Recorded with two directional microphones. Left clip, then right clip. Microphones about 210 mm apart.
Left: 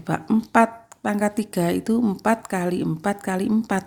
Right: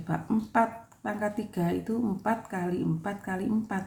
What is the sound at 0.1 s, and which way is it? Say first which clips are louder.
A woman's voice: left 8 dB; 40° left (ahead or behind).